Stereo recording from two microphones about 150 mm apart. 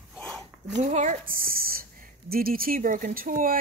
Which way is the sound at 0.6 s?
50° right (ahead or behind).